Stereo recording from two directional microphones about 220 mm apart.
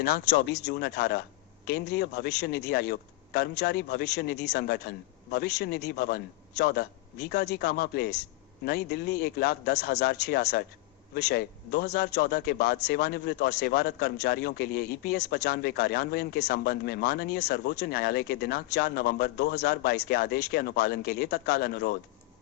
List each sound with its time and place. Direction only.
0.0 s a man's voice: 45° left (ahead or behind)